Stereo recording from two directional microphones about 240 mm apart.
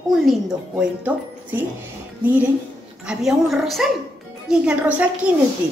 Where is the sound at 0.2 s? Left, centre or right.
Centre.